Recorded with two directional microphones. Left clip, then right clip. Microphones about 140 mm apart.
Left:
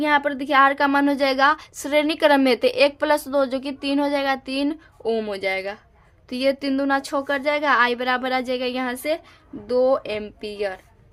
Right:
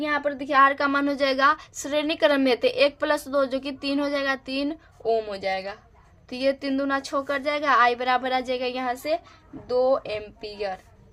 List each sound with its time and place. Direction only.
0.0 s a woman's voice: 45° left (ahead or behind)